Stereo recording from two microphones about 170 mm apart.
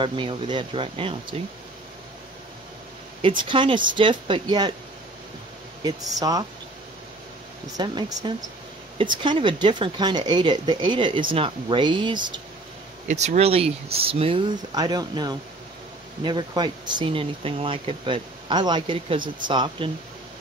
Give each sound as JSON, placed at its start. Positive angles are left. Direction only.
{"t": 0.0, "sound": "speech", "side_deg": -30}
{"t": 3.2, "sound": "speech", "side_deg": -30}
{"t": 5.9, "sound": "speech", "side_deg": -20}
{"t": 7.7, "sound": "speech", "side_deg": -25}
{"t": 13.1, "sound": "speech", "side_deg": -40}
{"t": 14.7, "sound": "speech", "side_deg": -25}